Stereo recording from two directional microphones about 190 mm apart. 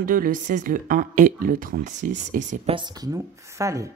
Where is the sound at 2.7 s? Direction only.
25° right (ahead or behind).